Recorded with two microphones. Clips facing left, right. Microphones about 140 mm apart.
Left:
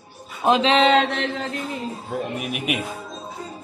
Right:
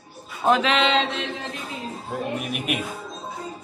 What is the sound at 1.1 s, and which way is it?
Chant, 60° left (ahead or behind).